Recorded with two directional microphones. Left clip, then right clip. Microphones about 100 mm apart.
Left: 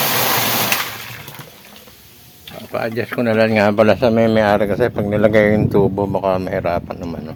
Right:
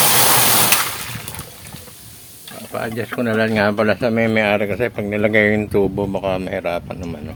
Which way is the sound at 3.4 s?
90° left.